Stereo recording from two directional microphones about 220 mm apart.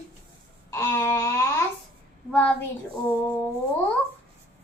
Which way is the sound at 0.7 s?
10° left (ahead or behind).